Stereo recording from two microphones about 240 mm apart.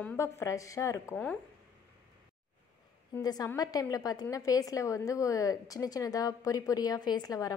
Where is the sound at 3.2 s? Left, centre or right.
Centre.